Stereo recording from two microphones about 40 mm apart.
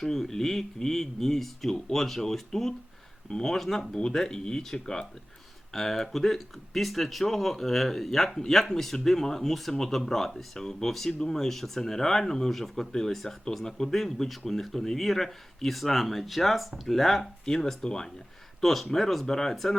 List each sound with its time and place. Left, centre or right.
0.0 s speech: centre
18.6 s speech: centre